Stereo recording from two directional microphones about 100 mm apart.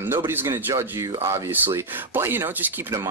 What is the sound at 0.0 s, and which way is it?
Speech, 20° right (ahead or behind).